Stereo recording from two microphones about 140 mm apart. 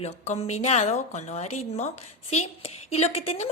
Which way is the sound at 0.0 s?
50° left (ahead or behind).